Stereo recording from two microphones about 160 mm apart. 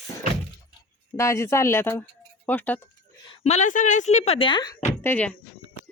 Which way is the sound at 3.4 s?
50° left (ahead or behind).